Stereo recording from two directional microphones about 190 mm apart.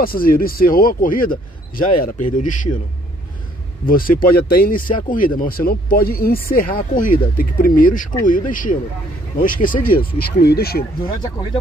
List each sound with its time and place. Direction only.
0.0 s speech: 50° left (ahead or behind)
3.8 s speech: 50° left (ahead or behind)
11.1 s speech: 20° left (ahead or behind)